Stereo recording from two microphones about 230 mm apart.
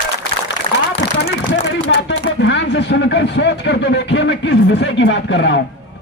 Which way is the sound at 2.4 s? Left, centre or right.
Left.